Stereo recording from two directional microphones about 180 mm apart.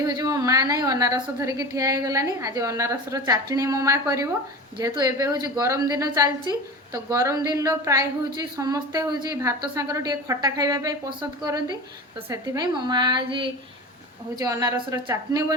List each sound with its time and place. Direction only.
0.2 s a woman's voice: 20° right (ahead or behind)